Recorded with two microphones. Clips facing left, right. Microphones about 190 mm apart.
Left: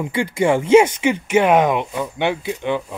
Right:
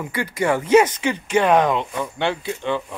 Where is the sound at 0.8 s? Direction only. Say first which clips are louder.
Left 4 dB; 15° left (ahead or behind).